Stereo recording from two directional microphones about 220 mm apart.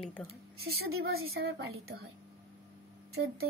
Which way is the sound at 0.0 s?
Centre (ahead or behind).